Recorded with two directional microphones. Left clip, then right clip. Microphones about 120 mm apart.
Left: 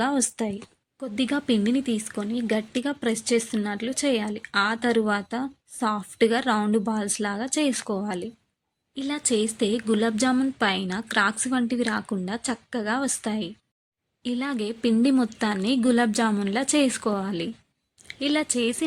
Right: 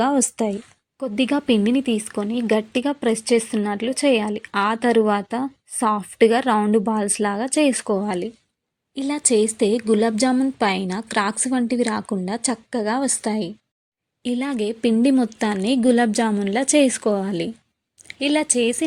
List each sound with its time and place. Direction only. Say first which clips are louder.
0.0 s a woman's voice: right 6 dB; 10° right (ahead or behind)